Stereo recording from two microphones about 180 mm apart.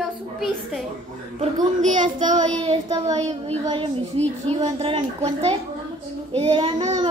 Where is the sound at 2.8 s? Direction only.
20° right (ahead or behind).